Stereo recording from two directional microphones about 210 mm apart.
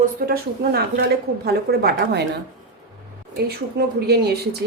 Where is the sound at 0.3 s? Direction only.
50° right (ahead or behind).